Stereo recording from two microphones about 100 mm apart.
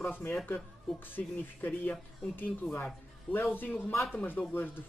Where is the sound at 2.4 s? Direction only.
15° left (ahead or behind).